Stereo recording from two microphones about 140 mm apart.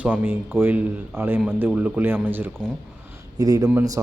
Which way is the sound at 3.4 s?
25° right (ahead or behind).